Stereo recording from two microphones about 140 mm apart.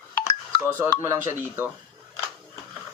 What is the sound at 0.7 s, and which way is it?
Speech, 15° right (ahead or behind).